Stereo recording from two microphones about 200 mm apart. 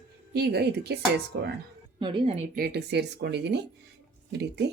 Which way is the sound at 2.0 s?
30° right (ahead or behind).